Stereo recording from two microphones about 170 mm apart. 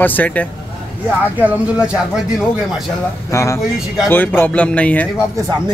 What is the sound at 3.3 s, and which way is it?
Speech, 15° left (ahead or behind).